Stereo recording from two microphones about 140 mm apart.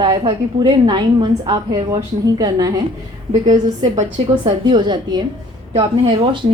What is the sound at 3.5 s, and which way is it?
A woman's voice, 55° right (ahead or behind).